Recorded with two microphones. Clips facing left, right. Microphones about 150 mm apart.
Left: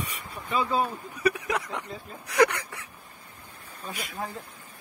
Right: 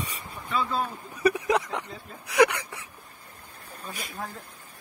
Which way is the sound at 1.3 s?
20° right (ahead or behind).